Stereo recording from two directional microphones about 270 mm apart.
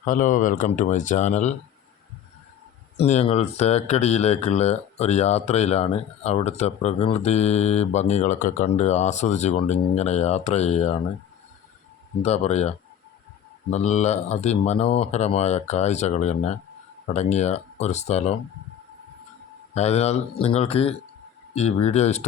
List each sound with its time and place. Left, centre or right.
0.0 s speech: left
3.0 s speech: left
12.2 s speech: left
19.7 s speech: left